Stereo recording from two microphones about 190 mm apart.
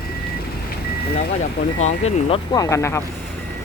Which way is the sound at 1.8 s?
35° left (ahead or behind).